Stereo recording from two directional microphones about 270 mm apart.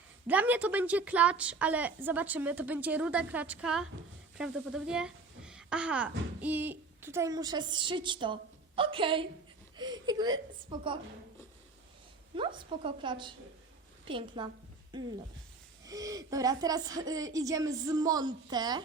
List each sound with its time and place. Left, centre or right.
0.3 s a woman's voice: centre
12.4 s a woman's voice: centre